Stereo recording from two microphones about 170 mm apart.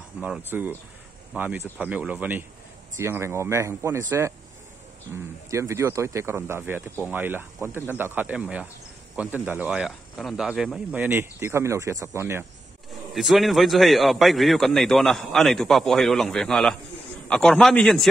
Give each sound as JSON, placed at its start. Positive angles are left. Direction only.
{"t": 0.2, "sound": "speech", "side_deg": -10}
{"t": 5.1, "sound": "speech", "side_deg": -15}
{"t": 13.1, "sound": "a man's voice", "side_deg": 0}